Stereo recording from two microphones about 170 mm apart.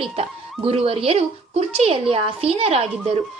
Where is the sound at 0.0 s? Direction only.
35° right (ahead or behind).